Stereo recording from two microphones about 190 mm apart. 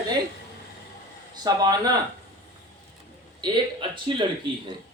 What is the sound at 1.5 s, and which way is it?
Speech, 20° right (ahead or behind).